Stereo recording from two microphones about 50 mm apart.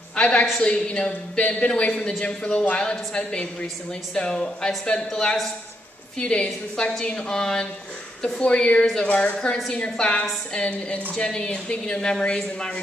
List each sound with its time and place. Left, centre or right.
0.1 s a woman's voice: left